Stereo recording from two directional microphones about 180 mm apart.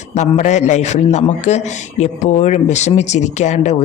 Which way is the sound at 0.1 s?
40° left (ahead or behind).